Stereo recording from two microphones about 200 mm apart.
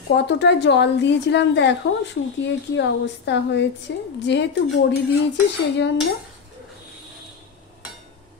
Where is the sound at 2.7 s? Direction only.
60° left (ahead or behind).